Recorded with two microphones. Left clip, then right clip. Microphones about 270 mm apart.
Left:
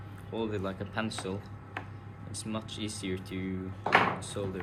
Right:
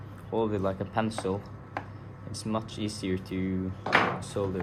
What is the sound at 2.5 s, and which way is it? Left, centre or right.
Speech, right.